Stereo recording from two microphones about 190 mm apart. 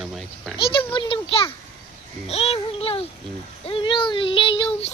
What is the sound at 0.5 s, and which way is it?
Speech, 25° left (ahead or behind).